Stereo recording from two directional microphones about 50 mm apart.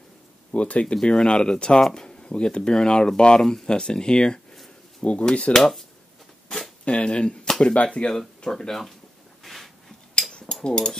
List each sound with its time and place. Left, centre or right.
0.5 s speech: left
5.5 s speech: centre
6.8 s speech: left
8.5 s speech: centre
9.4 s a sound: centre
10.4 s speech: centre